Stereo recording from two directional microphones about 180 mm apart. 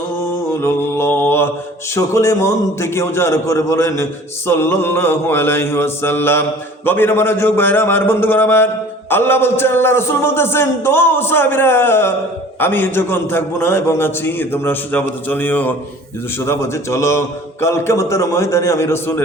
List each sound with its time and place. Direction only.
0.6 s mantra: 10° left (ahead or behind)
2.0 s a man's voice: 15° left (ahead or behind)